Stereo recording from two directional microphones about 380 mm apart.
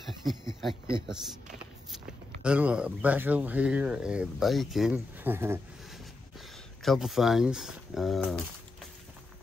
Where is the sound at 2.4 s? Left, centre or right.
Centre.